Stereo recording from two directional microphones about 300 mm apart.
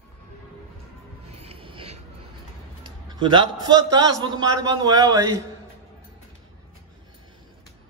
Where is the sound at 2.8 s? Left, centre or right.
Centre.